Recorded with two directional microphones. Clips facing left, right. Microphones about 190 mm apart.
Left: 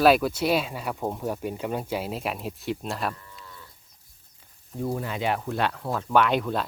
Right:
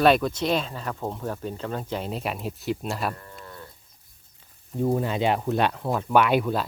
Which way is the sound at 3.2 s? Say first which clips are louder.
Right 5 dB; 55° right (ahead or behind).